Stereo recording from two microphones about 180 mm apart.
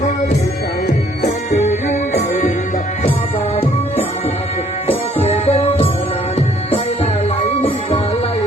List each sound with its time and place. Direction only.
1.5 s music: 40° left (ahead or behind)
5.2 s music: 35° left (ahead or behind)